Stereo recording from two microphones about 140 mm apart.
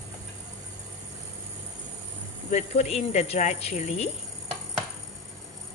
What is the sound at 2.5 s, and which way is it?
Speech, 55° left (ahead or behind).